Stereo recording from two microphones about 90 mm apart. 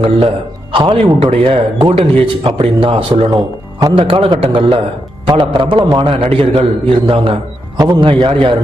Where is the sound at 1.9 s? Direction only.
70° right (ahead or behind).